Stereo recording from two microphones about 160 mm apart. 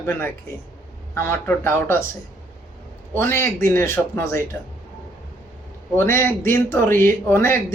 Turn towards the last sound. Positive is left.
turn(degrees=15)  # may be behind; listen again after turning